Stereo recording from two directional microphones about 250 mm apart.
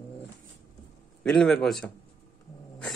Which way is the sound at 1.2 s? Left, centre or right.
Centre.